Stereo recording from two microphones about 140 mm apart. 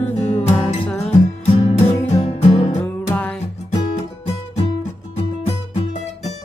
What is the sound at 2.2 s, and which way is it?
Music, 45° left (ahead or behind).